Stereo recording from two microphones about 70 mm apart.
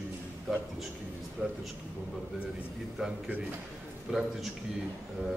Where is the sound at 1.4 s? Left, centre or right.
Centre.